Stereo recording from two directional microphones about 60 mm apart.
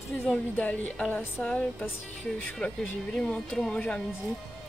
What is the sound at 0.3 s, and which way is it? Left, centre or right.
A woman's voice, left.